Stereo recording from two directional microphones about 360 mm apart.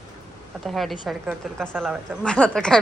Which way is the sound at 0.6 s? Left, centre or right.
Centre.